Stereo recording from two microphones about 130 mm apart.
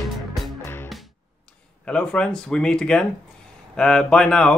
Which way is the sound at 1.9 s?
5° left (ahead or behind).